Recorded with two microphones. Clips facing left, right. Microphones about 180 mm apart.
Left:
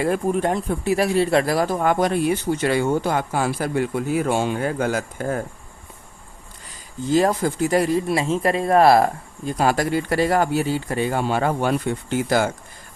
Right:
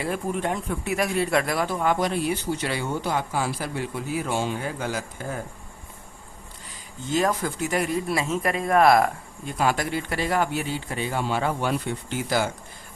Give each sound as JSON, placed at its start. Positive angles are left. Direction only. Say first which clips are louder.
{"t": 0.0, "sound": "speech", "louder": "left 6 dB", "side_deg": 45}
{"t": 7.1, "sound": "speech", "louder": "left 5 dB", "side_deg": 35}